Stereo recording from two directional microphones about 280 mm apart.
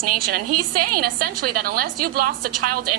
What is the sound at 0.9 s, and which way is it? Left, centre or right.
A man's voice, right.